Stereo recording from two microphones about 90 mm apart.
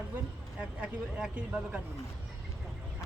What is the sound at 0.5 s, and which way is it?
Speech, 10° right (ahead or behind).